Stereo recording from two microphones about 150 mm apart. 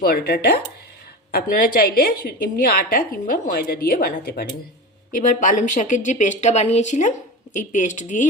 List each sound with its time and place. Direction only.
0.0 s a woman's voice: 90° left
1.3 s a woman's voice: 75° left (ahead or behind)
5.1 s speech: 60° left (ahead or behind)